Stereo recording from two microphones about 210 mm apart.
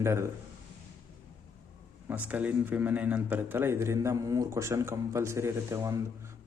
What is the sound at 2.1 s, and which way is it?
A man's voice, 5° right (ahead or behind).